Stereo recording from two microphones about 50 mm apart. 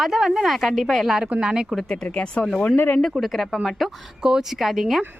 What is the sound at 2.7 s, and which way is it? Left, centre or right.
Speech, left.